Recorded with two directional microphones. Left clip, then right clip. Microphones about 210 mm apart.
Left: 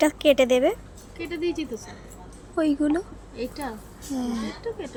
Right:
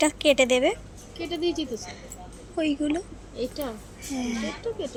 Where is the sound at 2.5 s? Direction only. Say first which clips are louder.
Left 3 dB; 20° left (ahead or behind).